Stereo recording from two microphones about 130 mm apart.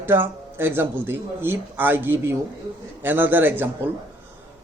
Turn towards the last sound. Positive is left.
turn(degrees=-15)  # may be behind; listen again after turning